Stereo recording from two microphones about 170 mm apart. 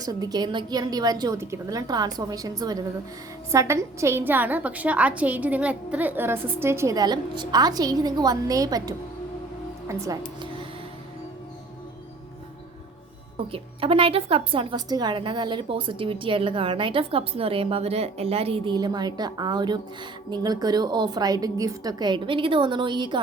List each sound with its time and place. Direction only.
0.0 s a woman's voice: 20° right (ahead or behind)
13.3 s a woman's voice: 30° right (ahead or behind)